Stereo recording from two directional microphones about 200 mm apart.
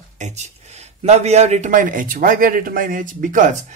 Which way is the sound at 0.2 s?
35° right (ahead or behind).